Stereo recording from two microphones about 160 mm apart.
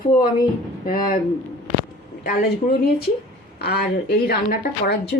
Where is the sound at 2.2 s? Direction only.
60° left (ahead or behind).